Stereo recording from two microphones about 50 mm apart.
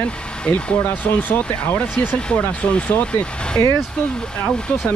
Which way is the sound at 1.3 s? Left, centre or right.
Left.